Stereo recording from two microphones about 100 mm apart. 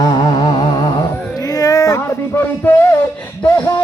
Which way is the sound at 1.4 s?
40° left (ahead or behind).